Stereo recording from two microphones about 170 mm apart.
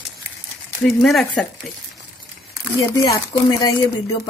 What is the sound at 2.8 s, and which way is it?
Speech, 25° left (ahead or behind).